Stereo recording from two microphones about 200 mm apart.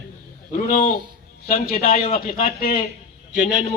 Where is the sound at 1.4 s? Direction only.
50° left (ahead or behind).